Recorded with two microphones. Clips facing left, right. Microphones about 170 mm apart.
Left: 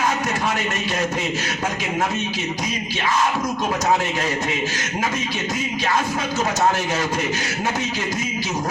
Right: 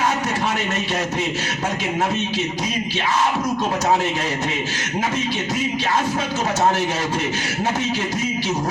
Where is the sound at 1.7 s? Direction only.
30° right (ahead or behind).